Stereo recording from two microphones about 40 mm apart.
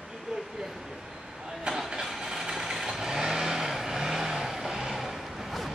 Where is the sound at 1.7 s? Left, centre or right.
Centre.